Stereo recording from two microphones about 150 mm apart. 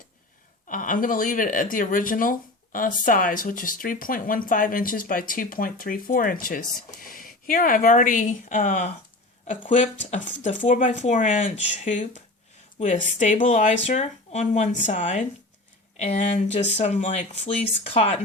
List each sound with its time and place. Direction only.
0.7 s speech: 65° left (ahead or behind); by 18.2 s 40° left (ahead or behind)